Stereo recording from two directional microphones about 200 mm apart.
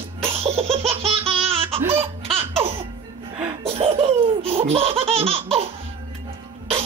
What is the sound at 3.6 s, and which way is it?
Laughter, 30° right (ahead or behind).